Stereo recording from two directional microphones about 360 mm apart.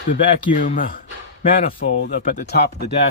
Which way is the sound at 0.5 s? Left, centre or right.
Left.